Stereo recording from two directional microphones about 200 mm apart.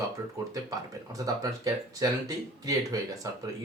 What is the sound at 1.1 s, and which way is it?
Speech, 15° right (ahead or behind).